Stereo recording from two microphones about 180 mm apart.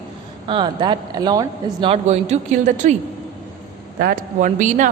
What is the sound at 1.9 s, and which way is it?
A man's voice, 40° right (ahead or behind).